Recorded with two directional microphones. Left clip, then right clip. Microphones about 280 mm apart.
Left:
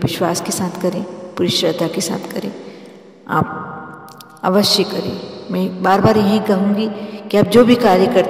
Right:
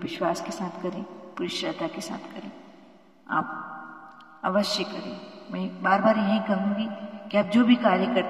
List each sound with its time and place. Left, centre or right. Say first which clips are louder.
0.0 s a woman's voice: left 9 dB; left
4.4 s a man's voice: left 11 dB; left